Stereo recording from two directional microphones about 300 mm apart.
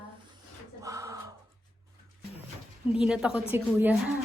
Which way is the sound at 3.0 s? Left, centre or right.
Centre.